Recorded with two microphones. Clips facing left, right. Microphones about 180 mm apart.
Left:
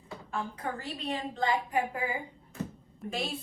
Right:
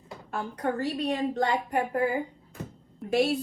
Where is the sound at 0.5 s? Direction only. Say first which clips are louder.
Right 8 dB; 65° right (ahead or behind).